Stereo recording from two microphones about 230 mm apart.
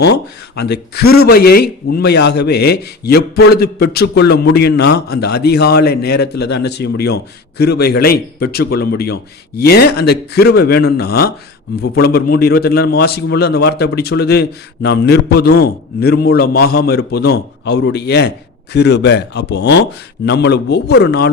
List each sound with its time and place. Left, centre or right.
0.0 s speech: left